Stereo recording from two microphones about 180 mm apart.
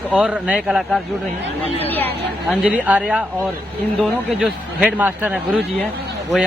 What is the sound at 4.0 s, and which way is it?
Speech, 5° left (ahead or behind).